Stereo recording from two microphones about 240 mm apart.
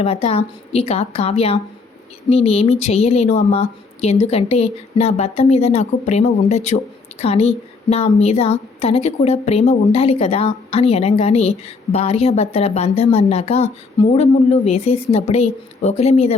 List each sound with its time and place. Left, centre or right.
0.0 s a woman's voice: left